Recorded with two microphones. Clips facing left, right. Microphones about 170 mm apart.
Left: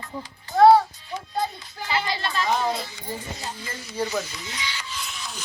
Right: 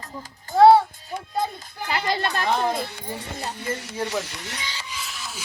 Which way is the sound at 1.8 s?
50° right (ahead or behind).